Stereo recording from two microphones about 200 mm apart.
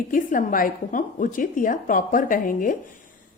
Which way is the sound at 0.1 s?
40° left (ahead or behind).